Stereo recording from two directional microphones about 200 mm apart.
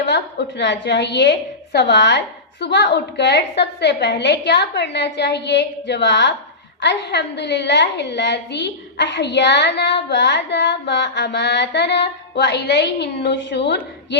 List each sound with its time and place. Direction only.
0.1 s a woman's voice: 60° left (ahead or behind)